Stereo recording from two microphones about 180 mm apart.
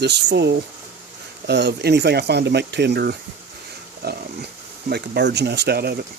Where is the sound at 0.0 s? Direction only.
70° right (ahead or behind).